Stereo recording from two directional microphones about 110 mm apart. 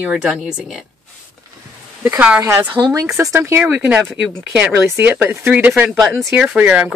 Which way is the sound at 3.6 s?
10° right (ahead or behind).